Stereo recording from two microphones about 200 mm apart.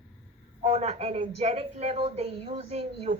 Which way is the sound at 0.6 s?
30° right (ahead or behind).